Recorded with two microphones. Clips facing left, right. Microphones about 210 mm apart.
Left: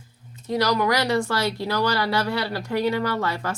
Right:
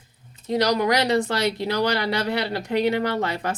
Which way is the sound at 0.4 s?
20° right (ahead or behind).